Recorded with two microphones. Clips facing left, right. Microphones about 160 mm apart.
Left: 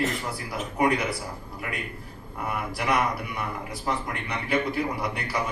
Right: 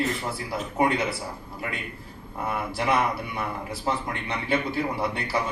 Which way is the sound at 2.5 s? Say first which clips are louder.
Right 1 dB; 25° right (ahead or behind).